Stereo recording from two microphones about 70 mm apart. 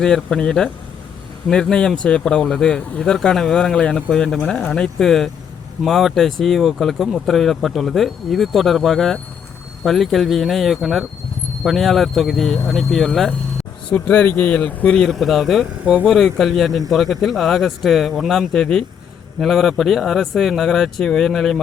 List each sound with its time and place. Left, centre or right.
0.0 s speech: centre
13.9 s speech: left; by 21.6 s centre